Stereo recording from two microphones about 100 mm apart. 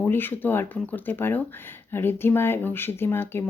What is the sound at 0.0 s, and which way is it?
A woman's voice, 20° left (ahead or behind).